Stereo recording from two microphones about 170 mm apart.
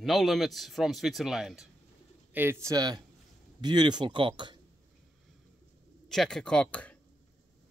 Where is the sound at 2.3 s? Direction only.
15° right (ahead or behind).